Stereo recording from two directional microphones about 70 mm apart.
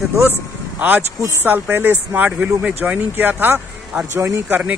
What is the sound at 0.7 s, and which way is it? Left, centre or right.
Speech, right.